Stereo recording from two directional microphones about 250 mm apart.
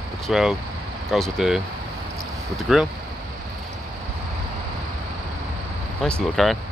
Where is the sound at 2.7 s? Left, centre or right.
Centre.